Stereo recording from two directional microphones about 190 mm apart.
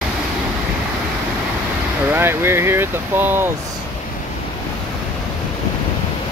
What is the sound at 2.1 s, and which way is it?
Speech, 10° right (ahead or behind).